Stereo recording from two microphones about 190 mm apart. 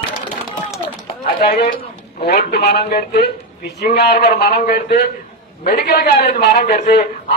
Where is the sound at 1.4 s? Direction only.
55° left (ahead or behind).